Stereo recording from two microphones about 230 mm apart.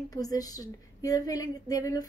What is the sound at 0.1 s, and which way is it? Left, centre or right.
A woman's voice, centre.